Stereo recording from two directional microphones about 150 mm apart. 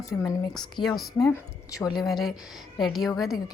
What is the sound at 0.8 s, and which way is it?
A woman's voice, centre (ahead or behind).